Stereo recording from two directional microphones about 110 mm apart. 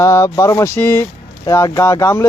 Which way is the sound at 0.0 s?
25° left (ahead or behind).